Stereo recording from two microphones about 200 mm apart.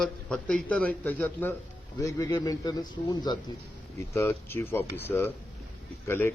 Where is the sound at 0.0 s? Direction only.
5° left (ahead or behind).